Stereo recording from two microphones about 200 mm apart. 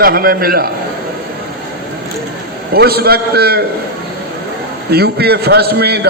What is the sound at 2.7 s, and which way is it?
Speech, 50° right (ahead or behind).